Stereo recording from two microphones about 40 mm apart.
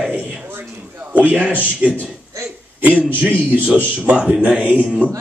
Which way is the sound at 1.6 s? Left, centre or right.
Right.